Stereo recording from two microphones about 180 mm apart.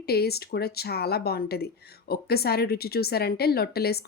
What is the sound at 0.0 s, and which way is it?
Speech, 60° left (ahead or behind).